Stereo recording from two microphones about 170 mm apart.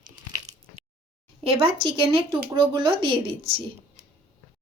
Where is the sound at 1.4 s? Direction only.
35° right (ahead or behind).